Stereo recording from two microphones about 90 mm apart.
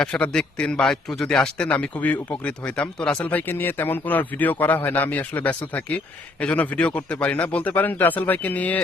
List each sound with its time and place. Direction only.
0.0 s a man's voice: 10° left (ahead or behind)
3.2 s a man's voice: 20° left (ahead or behind)